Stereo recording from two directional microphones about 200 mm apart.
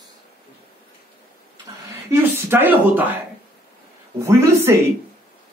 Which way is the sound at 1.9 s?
10° right (ahead or behind).